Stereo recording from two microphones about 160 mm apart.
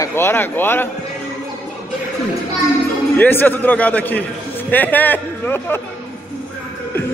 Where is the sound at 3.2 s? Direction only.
10° left (ahead or behind).